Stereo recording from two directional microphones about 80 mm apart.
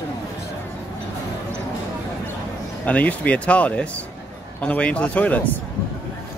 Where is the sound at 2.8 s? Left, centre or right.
Centre.